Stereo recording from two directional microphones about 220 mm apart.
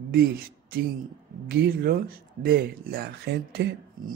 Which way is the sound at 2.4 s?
45° right (ahead or behind).